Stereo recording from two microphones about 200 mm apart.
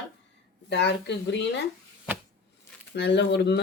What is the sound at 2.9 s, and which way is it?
Speech, 60° left (ahead or behind).